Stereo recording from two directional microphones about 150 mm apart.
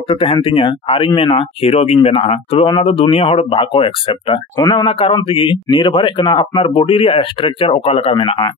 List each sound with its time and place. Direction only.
0.1 s speech: 40° left (ahead or behind)
4.6 s a man's voice: 25° left (ahead or behind)
4.8 s speech: 35° left (ahead or behind)